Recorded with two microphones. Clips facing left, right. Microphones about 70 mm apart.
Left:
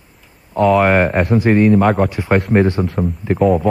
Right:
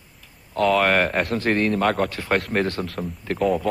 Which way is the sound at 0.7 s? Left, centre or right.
Centre.